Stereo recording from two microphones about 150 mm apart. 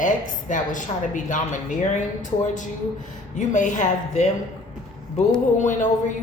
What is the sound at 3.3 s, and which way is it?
Speech, 55° left (ahead or behind).